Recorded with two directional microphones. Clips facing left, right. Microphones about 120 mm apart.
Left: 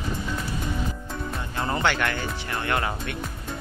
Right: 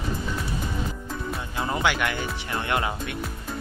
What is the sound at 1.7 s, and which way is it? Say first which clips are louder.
Speech: even; 10° right (ahead or behind).